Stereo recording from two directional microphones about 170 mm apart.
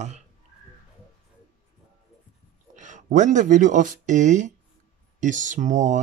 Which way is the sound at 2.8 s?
45° right (ahead or behind).